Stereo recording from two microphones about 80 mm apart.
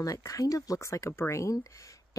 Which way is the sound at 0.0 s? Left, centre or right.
Left.